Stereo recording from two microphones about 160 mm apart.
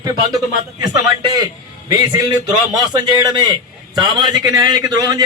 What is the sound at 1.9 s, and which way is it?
A man's voice, 25° right (ahead or behind).